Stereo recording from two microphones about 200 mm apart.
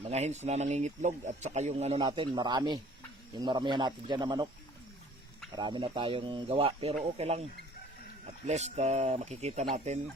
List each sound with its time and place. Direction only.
0.1 s speech: 35° right (ahead or behind)
5.5 s speech: 20° right (ahead or behind)
8.4 s speech: 35° right (ahead or behind)